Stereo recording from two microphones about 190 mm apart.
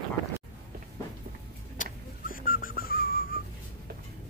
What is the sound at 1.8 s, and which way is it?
Whistling, 45° left (ahead or behind).